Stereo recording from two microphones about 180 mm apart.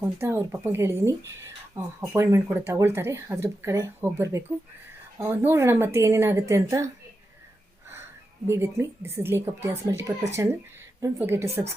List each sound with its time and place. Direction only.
0.0 s speech: 15° right (ahead or behind)
8.4 s speech: 15° right (ahead or behind)